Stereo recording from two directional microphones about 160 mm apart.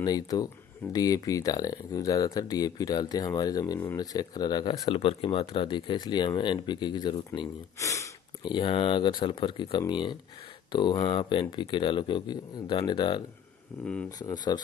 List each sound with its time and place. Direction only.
0.0 s speech: 25° left (ahead or behind)
8.5 s speech: 35° left (ahead or behind)
14.2 s speech: 25° left (ahead or behind)